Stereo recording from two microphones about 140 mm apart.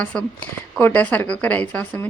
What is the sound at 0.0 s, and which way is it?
Speech, 10° left (ahead or behind).